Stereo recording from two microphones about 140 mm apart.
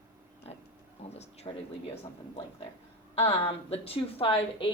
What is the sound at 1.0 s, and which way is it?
Speech, 50° left (ahead or behind).